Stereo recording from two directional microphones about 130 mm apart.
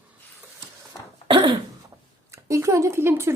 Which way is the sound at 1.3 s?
40° right (ahead or behind).